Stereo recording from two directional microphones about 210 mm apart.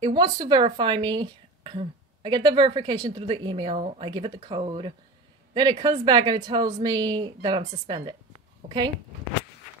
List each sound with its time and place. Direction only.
0.0 s speech: 20° right (ahead or behind)